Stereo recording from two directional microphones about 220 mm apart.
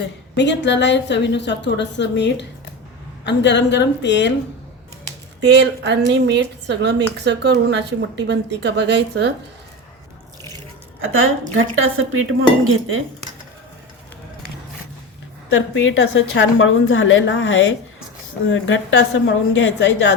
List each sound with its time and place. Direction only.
0.3 s a woman's voice: 55° left (ahead or behind)
5.5 s speech: 50° right (ahead or behind)
11.0 s speech: 65° right (ahead or behind)
15.7 s a woman's voice: 60° left (ahead or behind)